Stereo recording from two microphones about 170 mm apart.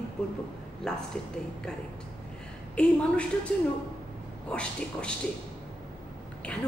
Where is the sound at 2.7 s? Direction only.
5° left (ahead or behind).